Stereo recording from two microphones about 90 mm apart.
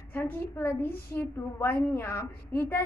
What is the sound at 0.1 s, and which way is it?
A woman's voice, 25° left (ahead or behind).